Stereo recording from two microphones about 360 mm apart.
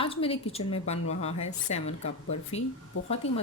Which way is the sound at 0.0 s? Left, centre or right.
Centre.